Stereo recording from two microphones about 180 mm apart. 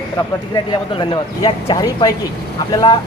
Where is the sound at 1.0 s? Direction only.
30° left (ahead or behind).